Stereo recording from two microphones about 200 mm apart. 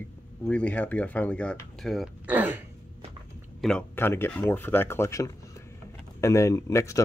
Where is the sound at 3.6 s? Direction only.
5° left (ahead or behind).